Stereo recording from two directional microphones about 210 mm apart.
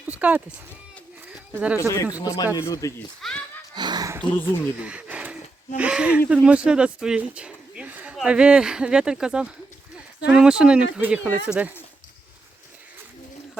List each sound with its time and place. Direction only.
0.0 s a sound: 5° right (ahead or behind)
1.5 s speech: 10° right (ahead or behind)
2.1 s speech: 15° left (ahead or behind)
3.2 s speech: centre (ahead or behind)
3.8 s a sound: 20° right (ahead or behind)
4.2 s speech: 5° left (ahead or behind)
4.8 s speech: 5° right (ahead or behind)